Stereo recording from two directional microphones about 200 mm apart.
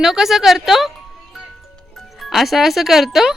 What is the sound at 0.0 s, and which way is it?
Speech, centre (ahead or behind).